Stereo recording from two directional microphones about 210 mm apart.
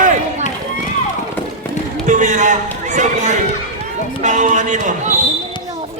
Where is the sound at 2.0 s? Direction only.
35° right (ahead or behind).